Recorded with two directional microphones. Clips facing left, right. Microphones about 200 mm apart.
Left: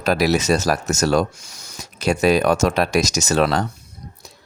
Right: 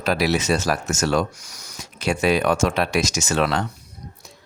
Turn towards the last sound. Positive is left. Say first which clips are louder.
# left 3 dB
turn(degrees=40)  # may be behind; listen again after turning